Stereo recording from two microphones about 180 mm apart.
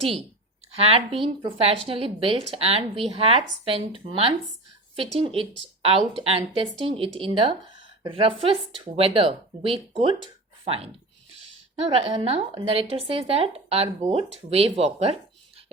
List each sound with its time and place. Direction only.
0.8 s speech: 30° right (ahead or behind)
11.8 s speech: 35° right (ahead or behind)